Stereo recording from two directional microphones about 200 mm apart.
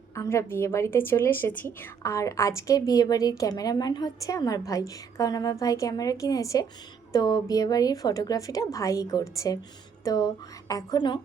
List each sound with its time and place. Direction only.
0.2 s a woman's voice: 15° left (ahead or behind)